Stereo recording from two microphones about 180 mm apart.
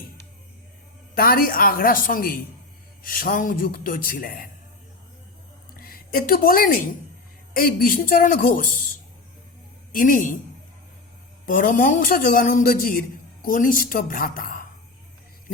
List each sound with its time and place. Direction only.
1.1 s a man's voice: 55° left (ahead or behind)
5.7 s a woman's voice: 55° left (ahead or behind)
9.9 s a man's voice: 50° left (ahead or behind)
11.4 s a man's voice: 50° left (ahead or behind)